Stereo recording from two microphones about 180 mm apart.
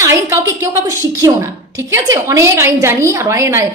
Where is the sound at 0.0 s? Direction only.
15° right (ahead or behind).